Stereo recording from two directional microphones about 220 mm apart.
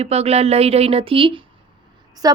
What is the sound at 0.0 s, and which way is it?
Speech, 30° right (ahead or behind).